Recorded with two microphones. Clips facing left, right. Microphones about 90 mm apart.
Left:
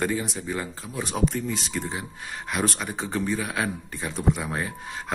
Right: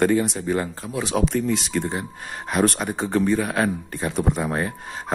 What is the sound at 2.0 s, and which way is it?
Speech, 40° right (ahead or behind).